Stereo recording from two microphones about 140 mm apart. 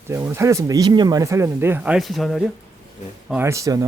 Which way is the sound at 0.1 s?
20° right (ahead or behind).